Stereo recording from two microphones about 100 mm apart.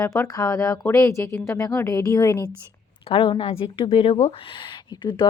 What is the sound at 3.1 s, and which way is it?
Speech, 60° left (ahead or behind).